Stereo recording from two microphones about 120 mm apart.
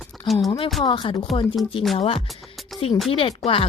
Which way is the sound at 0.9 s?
40° left (ahead or behind).